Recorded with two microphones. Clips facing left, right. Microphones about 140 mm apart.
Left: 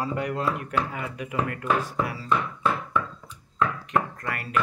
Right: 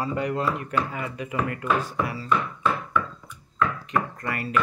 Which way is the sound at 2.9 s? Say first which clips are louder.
Right 1 dB; 30° left (ahead or behind).